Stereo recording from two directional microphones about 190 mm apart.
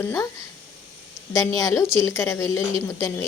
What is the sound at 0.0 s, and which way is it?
Speech, 15° left (ahead or behind).